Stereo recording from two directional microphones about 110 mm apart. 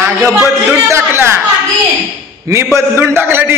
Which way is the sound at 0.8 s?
25° right (ahead or behind).